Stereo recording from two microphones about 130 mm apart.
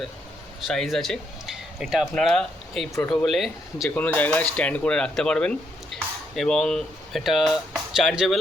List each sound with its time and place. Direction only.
0.7 s speech: centre (ahead or behind)
3.8 s speech: 10° left (ahead or behind)